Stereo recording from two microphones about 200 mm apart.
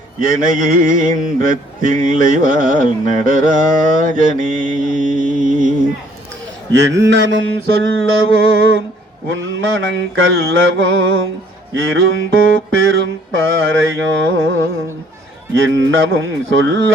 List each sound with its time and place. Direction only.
0.2 s male singing: 45° right (ahead or behind)
6.7 s mantra: 60° right (ahead or behind); by 8.4 s 90° right
9.3 s mantra: 75° right (ahead or behind)
11.7 s speech: 80° right
12.8 s mantra: 75° right (ahead or behind)
15.5 s mantra: 70° right (ahead or behind)